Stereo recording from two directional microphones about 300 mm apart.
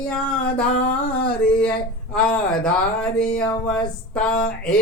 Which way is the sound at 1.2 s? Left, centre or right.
Centre.